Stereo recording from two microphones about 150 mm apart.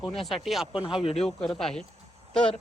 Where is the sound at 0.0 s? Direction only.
Centre (ahead or behind).